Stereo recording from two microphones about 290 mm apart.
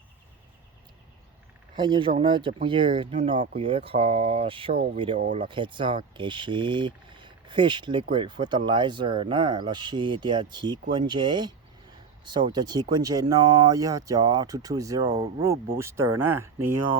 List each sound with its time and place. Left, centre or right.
1.7 s speech: centre
15.8 s speech: centre